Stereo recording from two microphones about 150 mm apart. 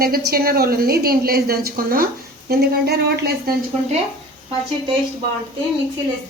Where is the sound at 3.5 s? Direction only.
80° right.